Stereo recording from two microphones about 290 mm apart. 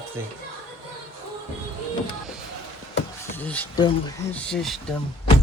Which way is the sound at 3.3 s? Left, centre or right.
Centre.